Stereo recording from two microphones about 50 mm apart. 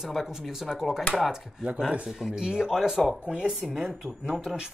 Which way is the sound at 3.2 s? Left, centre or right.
Centre.